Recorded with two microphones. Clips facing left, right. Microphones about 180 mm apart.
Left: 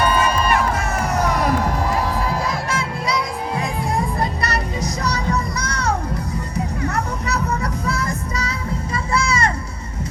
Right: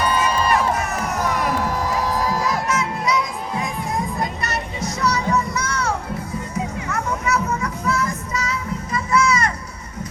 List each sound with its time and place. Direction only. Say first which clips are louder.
2.6 s music: right 2 dB; 30° left (ahead or behind)